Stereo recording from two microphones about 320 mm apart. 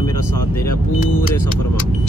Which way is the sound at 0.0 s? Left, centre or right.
Centre.